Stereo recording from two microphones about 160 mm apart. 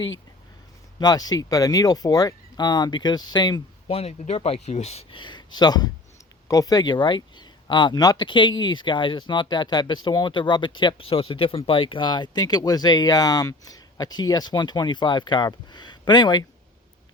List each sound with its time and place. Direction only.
0.9 s speech: 25° left (ahead or behind)
3.8 s speech: 40° left (ahead or behind)